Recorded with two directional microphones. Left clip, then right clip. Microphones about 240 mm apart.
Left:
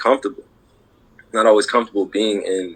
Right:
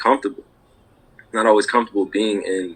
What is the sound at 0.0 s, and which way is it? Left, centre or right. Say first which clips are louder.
Speech: left 1 dB; right.